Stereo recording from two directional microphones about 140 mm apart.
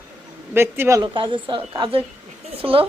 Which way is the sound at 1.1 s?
35° right (ahead or behind).